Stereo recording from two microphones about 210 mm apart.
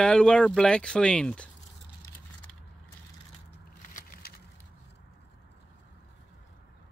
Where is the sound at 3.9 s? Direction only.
45° left (ahead or behind).